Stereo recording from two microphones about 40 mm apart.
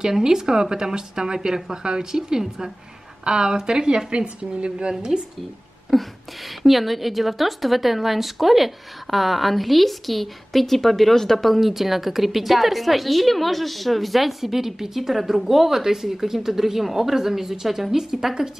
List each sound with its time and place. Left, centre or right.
0.0 s speech: centre
5.9 s speech: centre